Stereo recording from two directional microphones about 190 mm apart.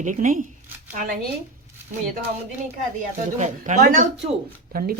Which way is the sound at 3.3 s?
40° right (ahead or behind).